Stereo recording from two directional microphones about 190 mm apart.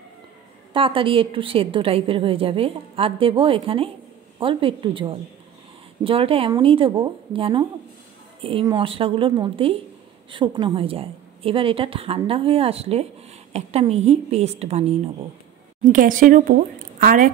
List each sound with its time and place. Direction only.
0.7 s a woman's voice: 30° right (ahead or behind)
15.8 s a woman's voice: 45° right (ahead or behind)